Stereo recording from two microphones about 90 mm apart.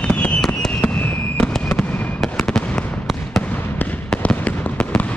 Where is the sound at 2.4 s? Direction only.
10° left (ahead or behind).